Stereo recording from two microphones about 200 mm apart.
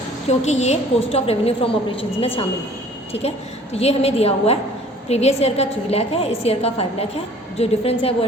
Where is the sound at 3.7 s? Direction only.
30° left (ahead or behind).